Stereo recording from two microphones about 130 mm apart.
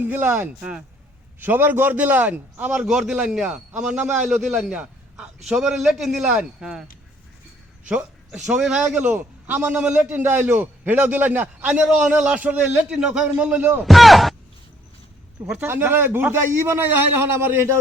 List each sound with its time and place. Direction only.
0.0 s a man's voice: 15° right (ahead or behind)
7.9 s a sound: 10° right (ahead or behind)
8.4 s a man's voice: 5° right (ahead or behind)
13.8 s a man's voice: centre (ahead or behind)
15.6 s a man's voice: 15° right (ahead or behind)